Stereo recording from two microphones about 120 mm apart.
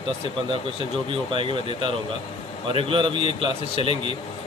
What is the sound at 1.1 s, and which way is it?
Speech, 45° right (ahead or behind).